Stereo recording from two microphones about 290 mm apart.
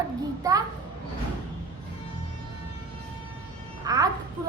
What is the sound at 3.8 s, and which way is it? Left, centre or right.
Speech, centre.